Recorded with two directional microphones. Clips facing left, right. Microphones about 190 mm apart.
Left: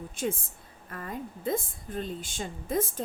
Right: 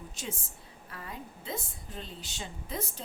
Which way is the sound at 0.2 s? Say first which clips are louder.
Left 11 dB; 55° left (ahead or behind).